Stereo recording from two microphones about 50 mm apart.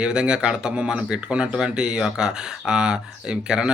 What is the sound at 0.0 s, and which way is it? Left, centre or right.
Speech, centre.